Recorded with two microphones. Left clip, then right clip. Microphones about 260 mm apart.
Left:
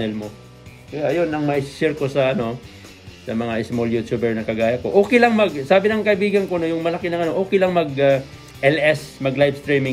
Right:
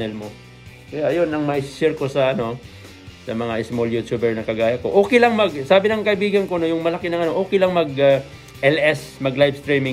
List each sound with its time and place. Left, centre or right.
0.9 s speech: centre